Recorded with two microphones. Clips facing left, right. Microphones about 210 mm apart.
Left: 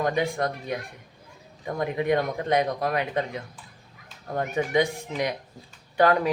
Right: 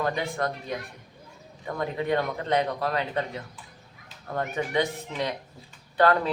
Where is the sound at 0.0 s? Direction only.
15° left (ahead or behind).